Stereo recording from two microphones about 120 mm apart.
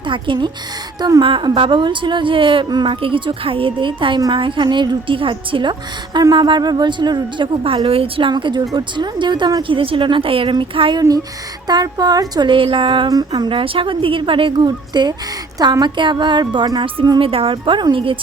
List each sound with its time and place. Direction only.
0.0 s a woman's voice: 45° right (ahead or behind)
11.7 s a woman's voice: 35° right (ahead or behind)